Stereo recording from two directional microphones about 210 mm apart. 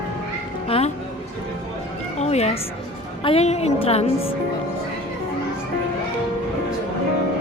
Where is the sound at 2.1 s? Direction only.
30° left (ahead or behind).